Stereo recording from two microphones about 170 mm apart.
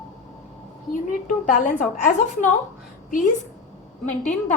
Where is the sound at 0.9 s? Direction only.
50° left (ahead or behind).